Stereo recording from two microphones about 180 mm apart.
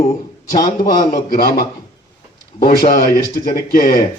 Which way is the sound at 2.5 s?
50° left (ahead or behind).